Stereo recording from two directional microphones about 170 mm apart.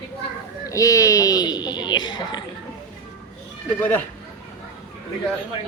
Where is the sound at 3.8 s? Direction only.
10° left (ahead or behind).